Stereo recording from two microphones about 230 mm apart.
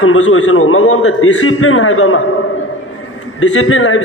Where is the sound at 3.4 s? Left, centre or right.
Left.